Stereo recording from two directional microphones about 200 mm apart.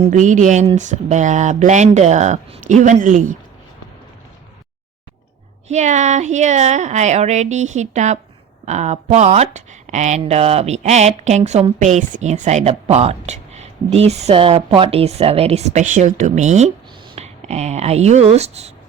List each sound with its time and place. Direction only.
0.0 s speech: 40° right (ahead or behind)
5.6 s speech: 35° right (ahead or behind)